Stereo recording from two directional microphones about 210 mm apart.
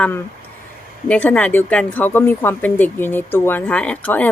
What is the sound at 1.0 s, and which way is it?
Speech, 5° left (ahead or behind).